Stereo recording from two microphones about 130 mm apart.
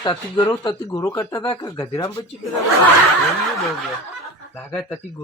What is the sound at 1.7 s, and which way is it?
Speech, 25° left (ahead or behind).